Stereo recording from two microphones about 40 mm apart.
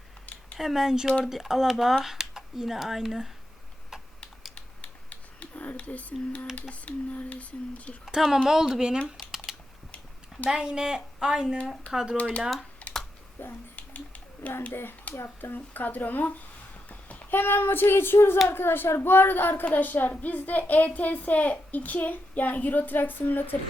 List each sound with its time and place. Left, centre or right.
0.6 s speech: centre
4.5 s typing: left
6.6 s a sound: left
8.0 s speech: centre
9.5 s typing: centre
10.5 s speech: right
12.8 s typing: left
13.4 s speech: left
13.7 s a sound: left
14.7 s a child's voice: left
15.5 s speech: left
16.9 s a sound: left
17.3 s child singing: left
18.4 s speech: left